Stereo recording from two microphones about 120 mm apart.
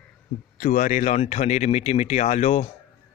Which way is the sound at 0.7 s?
90° left.